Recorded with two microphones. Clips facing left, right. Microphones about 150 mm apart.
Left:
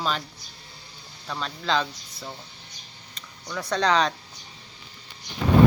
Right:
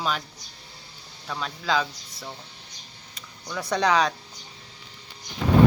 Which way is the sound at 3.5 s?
10° right (ahead or behind).